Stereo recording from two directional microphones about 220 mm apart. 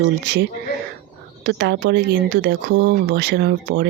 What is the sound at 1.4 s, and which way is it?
Speech, 50° right (ahead or behind).